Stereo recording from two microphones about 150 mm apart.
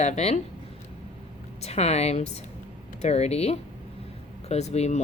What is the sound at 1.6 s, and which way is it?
Speech, 45° left (ahead or behind).